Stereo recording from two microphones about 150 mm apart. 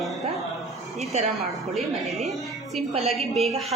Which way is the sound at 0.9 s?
45° right (ahead or behind).